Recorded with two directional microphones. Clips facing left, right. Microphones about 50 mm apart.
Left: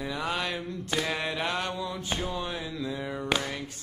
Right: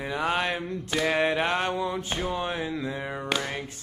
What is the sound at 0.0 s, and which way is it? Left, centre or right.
Music, right.